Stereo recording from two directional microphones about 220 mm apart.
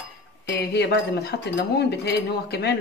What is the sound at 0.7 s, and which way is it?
Speech, 50° left (ahead or behind).